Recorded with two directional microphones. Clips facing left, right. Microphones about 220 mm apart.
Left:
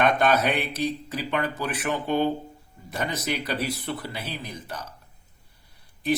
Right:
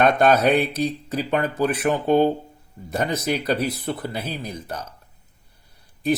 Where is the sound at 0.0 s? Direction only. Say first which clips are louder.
Right 5 dB; 45° right (ahead or behind).